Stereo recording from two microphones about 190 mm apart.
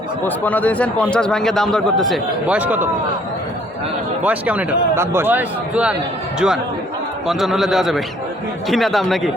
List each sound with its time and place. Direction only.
0.3 s a man's voice: 10° left (ahead or behind); by 2.9 s 10° right (ahead or behind)
4.2 s speech: 10° right (ahead or behind)
7.3 s a man's voice: centre (ahead or behind)